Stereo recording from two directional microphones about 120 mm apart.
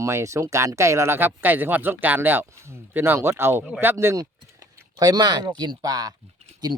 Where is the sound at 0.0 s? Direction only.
25° right (ahead or behind).